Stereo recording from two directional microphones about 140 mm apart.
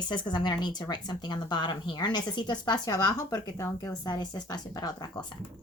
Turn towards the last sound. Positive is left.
turn(degrees=30)  # may be behind; listen again after turning